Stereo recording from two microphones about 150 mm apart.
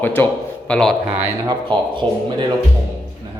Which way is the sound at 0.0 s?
15° left (ahead or behind).